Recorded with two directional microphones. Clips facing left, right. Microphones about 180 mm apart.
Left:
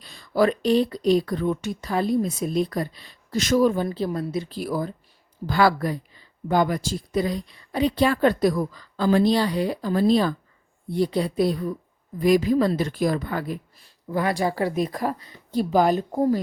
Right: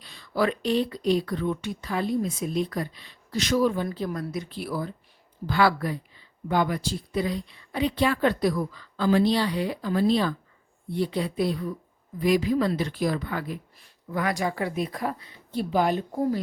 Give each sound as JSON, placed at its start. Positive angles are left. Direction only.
{"t": 0.0, "sound": "speech", "side_deg": 45}
{"t": 3.8, "sound": "speech", "side_deg": 30}
{"t": 14.1, "sound": "speech", "side_deg": 30}